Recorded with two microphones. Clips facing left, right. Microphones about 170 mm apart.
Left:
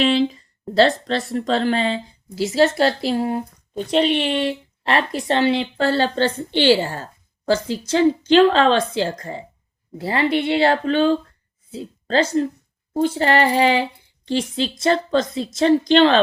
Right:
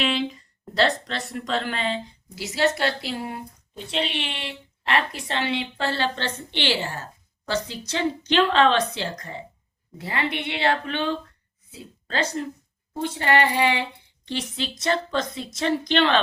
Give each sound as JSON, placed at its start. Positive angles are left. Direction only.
{"t": 0.0, "sound": "a woman's voice", "side_deg": 35}